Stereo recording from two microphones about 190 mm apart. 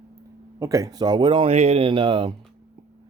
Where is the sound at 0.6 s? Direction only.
15° right (ahead or behind).